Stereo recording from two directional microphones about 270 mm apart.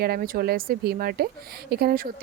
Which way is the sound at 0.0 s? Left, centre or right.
Right.